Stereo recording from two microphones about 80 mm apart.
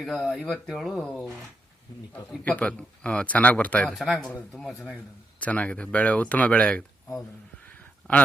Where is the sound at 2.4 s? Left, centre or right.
Centre.